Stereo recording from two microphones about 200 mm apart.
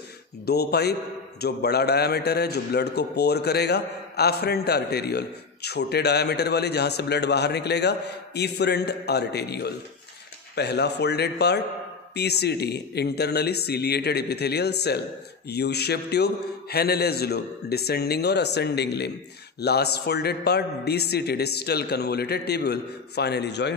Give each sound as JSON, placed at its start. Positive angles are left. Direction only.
{"t": 0.5, "sound": "a man's voice", "side_deg": 55}